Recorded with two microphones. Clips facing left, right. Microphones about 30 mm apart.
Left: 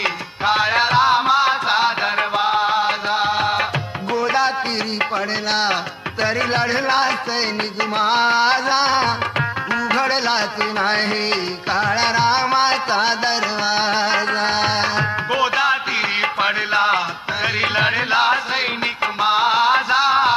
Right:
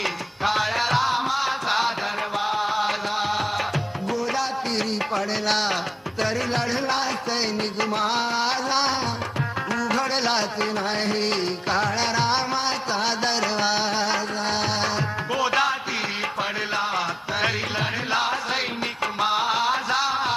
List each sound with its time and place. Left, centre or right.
0.0 s music: left
6.2 s music: left
10.2 s a sound: left
10.8 s music: left
12.1 s music: left
13.4 s a sound: centre
13.7 s music: left
19.2 s music: left
20.1 s a sound: left